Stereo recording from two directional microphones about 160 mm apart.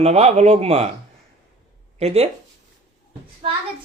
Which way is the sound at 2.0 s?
40° right (ahead or behind).